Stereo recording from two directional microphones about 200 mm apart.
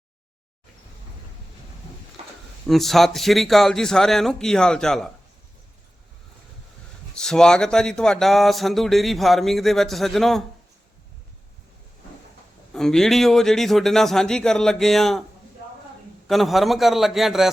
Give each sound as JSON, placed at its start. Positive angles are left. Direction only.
{"t": 2.6, "sound": "speech", "side_deg": 0}
{"t": 7.1, "sound": "speech", "side_deg": 5}
{"t": 12.7, "sound": "speech", "side_deg": 0}
{"t": 16.2, "sound": "speech", "side_deg": 0}